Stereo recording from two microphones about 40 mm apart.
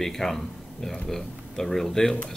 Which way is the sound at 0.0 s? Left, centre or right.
Centre.